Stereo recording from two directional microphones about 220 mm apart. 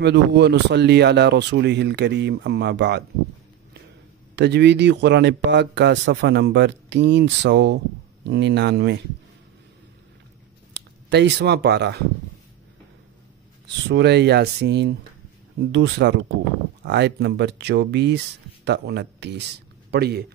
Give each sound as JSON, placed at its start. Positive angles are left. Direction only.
{"t": 0.0, "sound": "speech", "side_deg": -50}
{"t": 4.4, "sound": "speech", "side_deg": -50}
{"t": 10.7, "sound": "speech", "side_deg": -50}
{"t": 13.8, "sound": "speech", "side_deg": -50}